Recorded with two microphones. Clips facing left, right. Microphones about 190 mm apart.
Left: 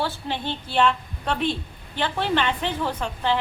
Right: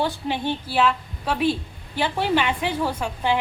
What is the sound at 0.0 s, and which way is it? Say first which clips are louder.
A woman's voice: right 3 dB; 15° right (ahead or behind).